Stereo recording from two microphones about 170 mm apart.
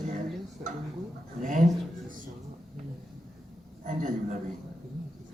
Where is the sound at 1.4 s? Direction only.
50° right (ahead or behind).